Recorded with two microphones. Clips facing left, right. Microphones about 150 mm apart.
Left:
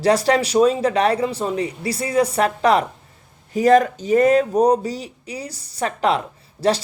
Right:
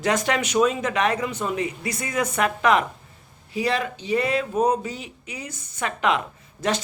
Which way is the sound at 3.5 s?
45° left (ahead or behind).